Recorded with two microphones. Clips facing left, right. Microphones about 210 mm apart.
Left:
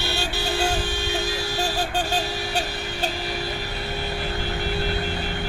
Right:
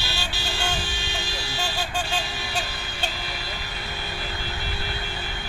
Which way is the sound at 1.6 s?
35° left (ahead or behind).